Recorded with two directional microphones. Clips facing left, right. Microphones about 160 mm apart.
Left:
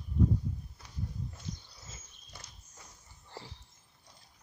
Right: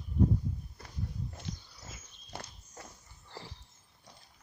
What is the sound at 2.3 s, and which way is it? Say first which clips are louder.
Walk: right 9 dB; 65° right (ahead or behind).